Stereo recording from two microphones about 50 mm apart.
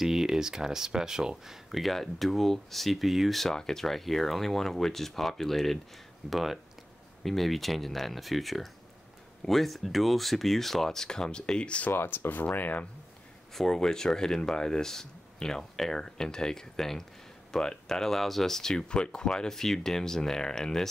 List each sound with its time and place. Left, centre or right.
0.0 s speech: centre; by 11.9 s left
11.9 s speech: left
13.5 s speech: centre